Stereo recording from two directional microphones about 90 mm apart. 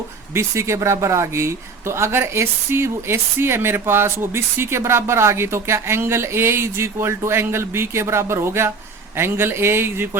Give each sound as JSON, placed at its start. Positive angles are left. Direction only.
{"t": 0.3, "sound": "speech", "side_deg": -30}